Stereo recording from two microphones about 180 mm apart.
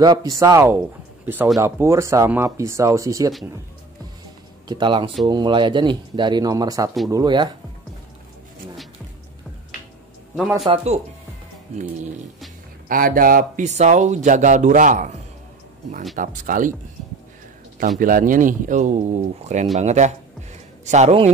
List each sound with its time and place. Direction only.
0.0 s speech: 20° right (ahead or behind)
4.6 s speech: 25° right (ahead or behind)
10.6 s a man's voice: 35° right (ahead or behind)
12.8 s speech: 50° right (ahead or behind)
16.2 s speech: 50° right (ahead or behind)
17.7 s a man's voice: 50° right (ahead or behind)